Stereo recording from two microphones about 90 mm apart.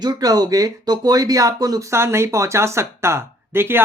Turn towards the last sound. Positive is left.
turn(degrees=-25)  # may be behind; listen again after turning